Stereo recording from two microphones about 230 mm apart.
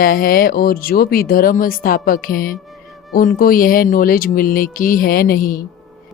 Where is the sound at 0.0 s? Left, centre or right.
Left.